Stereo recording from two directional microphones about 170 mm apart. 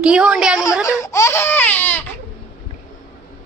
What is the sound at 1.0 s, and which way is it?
Baby cry, 15° left (ahead or behind).